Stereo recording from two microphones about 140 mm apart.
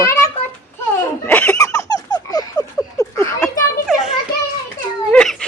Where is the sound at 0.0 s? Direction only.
20° left (ahead or behind).